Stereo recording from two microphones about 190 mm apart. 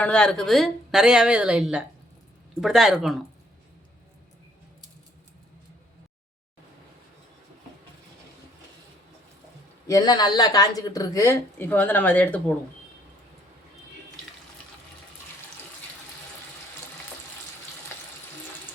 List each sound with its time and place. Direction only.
0.0 s a woman's voice: 5° left (ahead or behind)
9.8 s a woman's voice: 20° left (ahead or behind)